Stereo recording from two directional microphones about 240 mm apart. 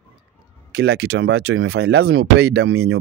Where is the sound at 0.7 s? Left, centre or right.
Right.